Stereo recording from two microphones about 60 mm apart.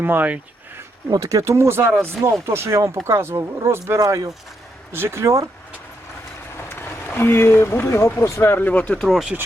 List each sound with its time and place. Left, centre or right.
0.0 s speech: right
1.1 s speech: right
4.0 s speech: right
4.9 s speech: right
6.7 s speech: left
9.0 s speech: centre